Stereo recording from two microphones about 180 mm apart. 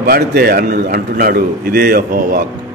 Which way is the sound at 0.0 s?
55° right (ahead or behind).